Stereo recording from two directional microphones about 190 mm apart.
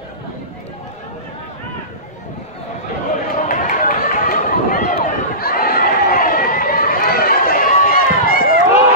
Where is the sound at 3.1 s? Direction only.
45° left (ahead or behind).